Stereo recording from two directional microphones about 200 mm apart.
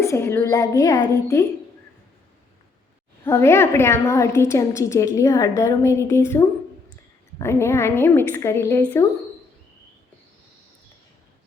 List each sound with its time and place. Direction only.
0.0 s a woman's voice: 15° left (ahead or behind)
3.2 s a woman's voice: 15° left (ahead or behind)